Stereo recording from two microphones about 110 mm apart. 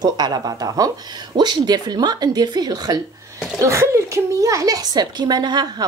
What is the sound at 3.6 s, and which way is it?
A woman's voice, 25° right (ahead or behind).